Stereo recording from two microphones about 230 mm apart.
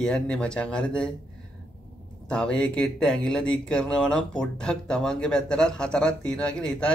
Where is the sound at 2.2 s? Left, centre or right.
Centre.